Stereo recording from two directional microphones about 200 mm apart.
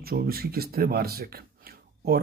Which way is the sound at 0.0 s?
50° right (ahead or behind).